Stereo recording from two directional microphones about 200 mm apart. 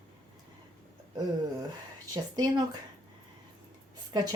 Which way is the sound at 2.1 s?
20° right (ahead or behind).